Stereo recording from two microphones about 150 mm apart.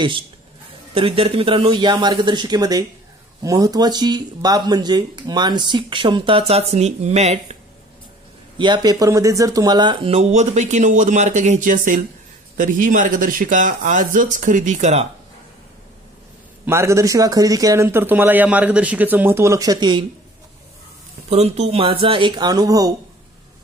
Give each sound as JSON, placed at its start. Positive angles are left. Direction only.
{"t": 0.9, "sound": "speech", "side_deg": -35}
{"t": 8.5, "sound": "speech", "side_deg": -30}
{"t": 16.6, "sound": "a man's voice", "side_deg": -20}
{"t": 21.3, "sound": "speech", "side_deg": -45}